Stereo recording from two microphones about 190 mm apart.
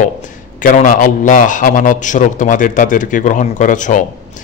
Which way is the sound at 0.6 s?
45° left (ahead or behind).